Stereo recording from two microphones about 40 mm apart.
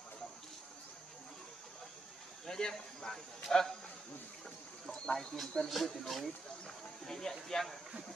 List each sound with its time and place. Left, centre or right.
2.4 s speech: centre
4.9 s speech: centre
5.7 s speech: centre